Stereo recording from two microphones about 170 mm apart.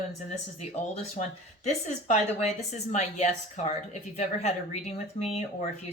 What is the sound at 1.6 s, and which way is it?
A woman's voice, 45° left (ahead or behind).